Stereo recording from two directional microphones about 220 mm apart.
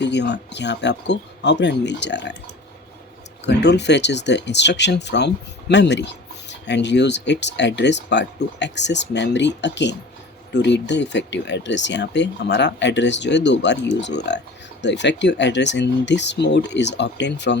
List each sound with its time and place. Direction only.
0.0 s speech: 50° left (ahead or behind)
3.4 s speech: 50° left (ahead or behind)